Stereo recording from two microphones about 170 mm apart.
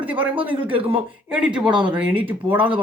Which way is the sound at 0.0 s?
10° right (ahead or behind).